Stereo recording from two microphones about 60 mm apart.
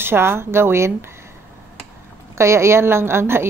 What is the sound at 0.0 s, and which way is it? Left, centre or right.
Speech, right.